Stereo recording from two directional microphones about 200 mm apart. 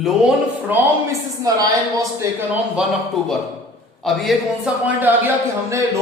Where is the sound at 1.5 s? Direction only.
20° right (ahead or behind).